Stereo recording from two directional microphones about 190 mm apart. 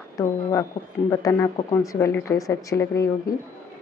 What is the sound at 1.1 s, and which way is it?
Speech, 15° left (ahead or behind).